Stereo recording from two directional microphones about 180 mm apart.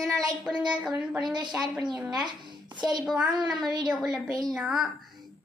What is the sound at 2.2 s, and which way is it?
Speech, 25° right (ahead or behind).